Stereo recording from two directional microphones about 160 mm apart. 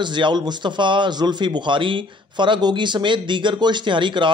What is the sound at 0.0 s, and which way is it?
A man's voice, 30° right (ahead or behind).